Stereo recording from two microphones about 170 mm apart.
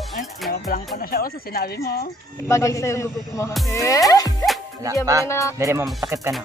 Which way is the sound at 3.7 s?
20° left (ahead or behind).